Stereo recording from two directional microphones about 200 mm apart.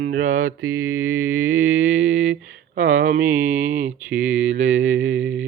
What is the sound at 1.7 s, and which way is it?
Mantra, 70° right (ahead or behind).